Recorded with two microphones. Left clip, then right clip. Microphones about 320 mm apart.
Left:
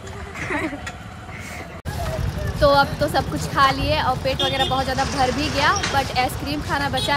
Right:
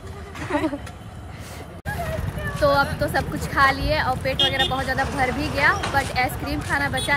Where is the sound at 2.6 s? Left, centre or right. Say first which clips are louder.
Left 3 dB; centre.